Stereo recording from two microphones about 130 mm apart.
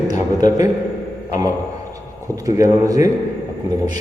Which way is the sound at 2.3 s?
25° right (ahead or behind).